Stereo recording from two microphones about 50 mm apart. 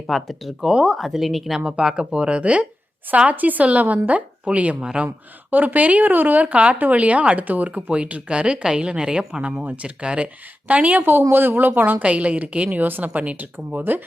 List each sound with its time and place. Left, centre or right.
0.1 s speech: centre
0.7 s speech: centre
0.9 s speech: centre
1.5 s speech: centre
3.2 s speech: right
11.3 s speech: right
12.0 s speech: right